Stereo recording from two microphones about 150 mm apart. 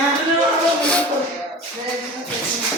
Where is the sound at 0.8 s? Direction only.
5° left (ahead or behind).